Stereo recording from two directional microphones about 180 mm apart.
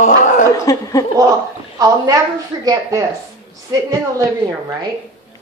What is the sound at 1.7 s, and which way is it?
A woman's voice, 20° right (ahead or behind).